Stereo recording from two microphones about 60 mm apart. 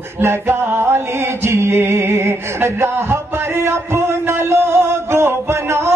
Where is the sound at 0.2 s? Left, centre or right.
Right.